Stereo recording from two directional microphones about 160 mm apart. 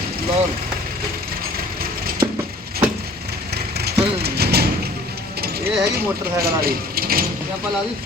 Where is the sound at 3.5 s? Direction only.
90° right.